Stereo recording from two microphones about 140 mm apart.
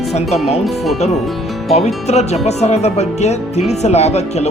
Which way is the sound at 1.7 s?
50° left (ahead or behind).